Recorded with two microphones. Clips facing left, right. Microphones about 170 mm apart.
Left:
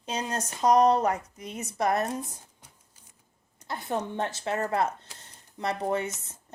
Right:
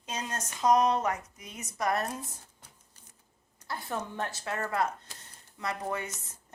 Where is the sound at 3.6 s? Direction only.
20° left (ahead or behind).